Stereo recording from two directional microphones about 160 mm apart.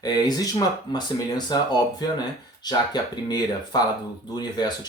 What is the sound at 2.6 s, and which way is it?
Speech, 25° left (ahead or behind).